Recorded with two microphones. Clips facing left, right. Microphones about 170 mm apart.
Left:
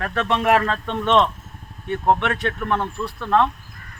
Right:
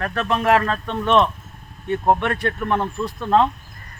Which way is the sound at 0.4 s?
10° left (ahead or behind).